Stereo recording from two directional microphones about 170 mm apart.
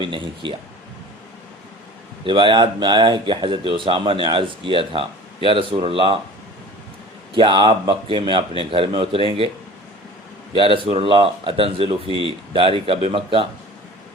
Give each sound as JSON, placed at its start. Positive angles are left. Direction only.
{"t": 0.0, "sound": "speech", "side_deg": -30}
{"t": 2.2, "sound": "speech", "side_deg": -30}
{"t": 7.3, "sound": "speech", "side_deg": -30}
{"t": 10.5, "sound": "speech", "side_deg": -30}